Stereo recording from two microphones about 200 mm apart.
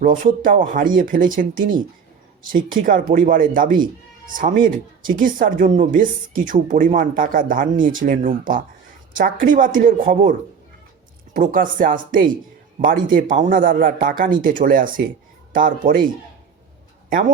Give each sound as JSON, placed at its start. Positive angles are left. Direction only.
{"t": 0.2, "sound": "speech", "side_deg": -45}
{"t": 11.3, "sound": "speech", "side_deg": -40}
{"t": 17.1, "sound": "speech", "side_deg": -45}